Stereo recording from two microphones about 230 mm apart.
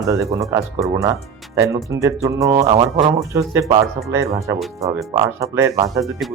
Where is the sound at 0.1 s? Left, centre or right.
Centre.